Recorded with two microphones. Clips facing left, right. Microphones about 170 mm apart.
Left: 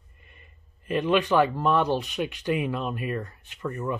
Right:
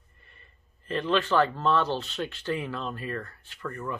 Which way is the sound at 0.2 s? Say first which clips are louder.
Left 3 dB; 15° left (ahead or behind).